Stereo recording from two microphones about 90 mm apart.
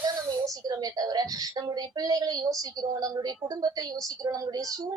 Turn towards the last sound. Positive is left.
turn(degrees=-45)  # may be behind; listen again after turning